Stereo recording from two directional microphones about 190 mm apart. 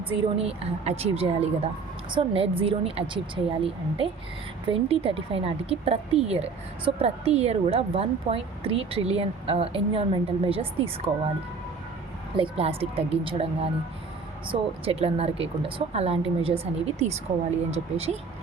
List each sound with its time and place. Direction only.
0.1 s a woman's voice: 30° right (ahead or behind)
12.4 s a woman's voice: 30° right (ahead or behind)